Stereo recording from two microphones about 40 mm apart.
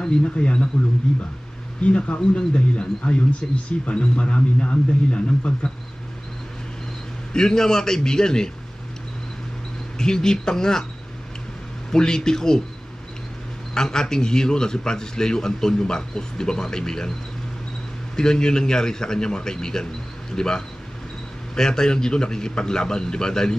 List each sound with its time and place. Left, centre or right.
0.2 s a man's voice: left
1.8 s a man's voice: left
7.3 s a man's voice: centre
9.9 s a man's voice: centre
11.9 s a man's voice: centre
13.7 s a man's voice: centre
18.1 s a man's voice: centre